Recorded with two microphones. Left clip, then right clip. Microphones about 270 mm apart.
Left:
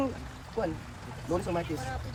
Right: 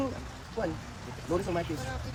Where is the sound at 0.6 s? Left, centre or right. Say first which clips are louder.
Left 1 dB; left.